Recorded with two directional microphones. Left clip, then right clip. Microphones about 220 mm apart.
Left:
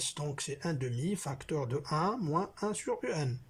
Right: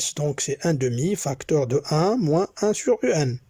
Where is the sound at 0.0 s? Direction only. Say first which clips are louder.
Right 12 dB; 35° right (ahead or behind).